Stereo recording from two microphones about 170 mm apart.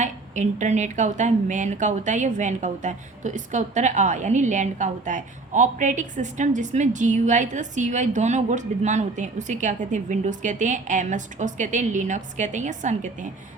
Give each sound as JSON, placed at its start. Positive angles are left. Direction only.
{"t": 0.0, "sound": "speech", "side_deg": -45}